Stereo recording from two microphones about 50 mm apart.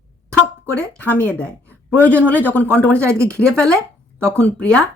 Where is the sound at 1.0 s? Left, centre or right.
Left.